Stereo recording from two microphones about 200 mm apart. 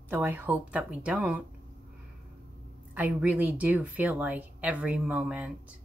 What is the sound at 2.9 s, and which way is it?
Speech, 5° right (ahead or behind).